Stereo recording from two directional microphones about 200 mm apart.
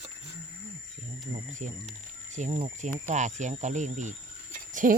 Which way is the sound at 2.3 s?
35° right (ahead or behind).